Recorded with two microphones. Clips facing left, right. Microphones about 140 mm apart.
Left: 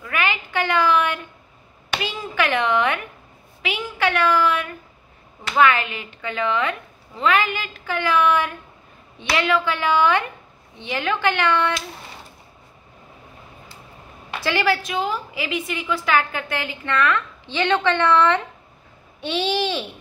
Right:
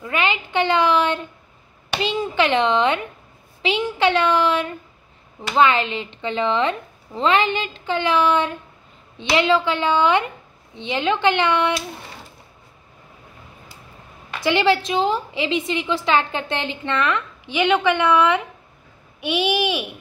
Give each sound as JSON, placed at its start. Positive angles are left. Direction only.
{"t": 0.0, "sound": "a sound", "side_deg": -20}
{"t": 2.0, "sound": "a woman's voice", "side_deg": -25}
{"t": 14.4, "sound": "a woman's voice", "side_deg": -20}